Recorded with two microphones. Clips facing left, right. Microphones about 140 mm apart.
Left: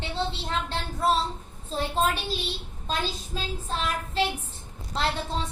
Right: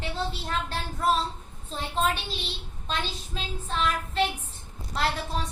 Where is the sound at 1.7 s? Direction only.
40° left (ahead or behind).